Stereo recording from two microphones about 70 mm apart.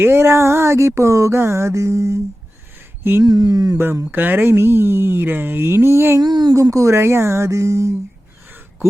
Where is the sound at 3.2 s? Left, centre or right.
Right.